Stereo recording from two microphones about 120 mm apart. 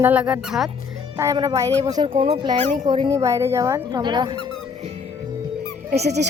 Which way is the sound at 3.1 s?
25° right (ahead or behind).